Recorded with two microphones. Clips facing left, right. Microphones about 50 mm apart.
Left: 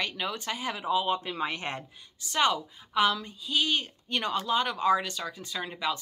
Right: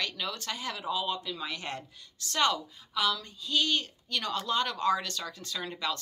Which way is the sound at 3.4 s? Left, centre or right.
Centre.